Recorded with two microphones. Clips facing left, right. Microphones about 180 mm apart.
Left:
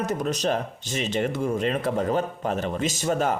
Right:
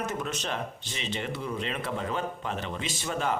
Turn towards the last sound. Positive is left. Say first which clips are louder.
# left 7 dB
turn(degrees=45)  # may be behind; listen again after turning